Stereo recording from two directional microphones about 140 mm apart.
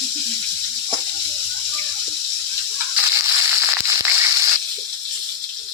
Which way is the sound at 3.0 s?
15° right (ahead or behind).